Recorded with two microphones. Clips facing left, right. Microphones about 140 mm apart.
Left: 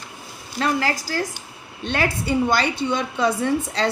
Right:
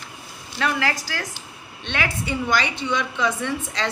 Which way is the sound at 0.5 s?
35° left (ahead or behind).